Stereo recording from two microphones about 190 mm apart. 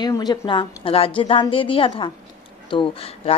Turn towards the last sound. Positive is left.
turn(degrees=30)  # may be behind; listen again after turning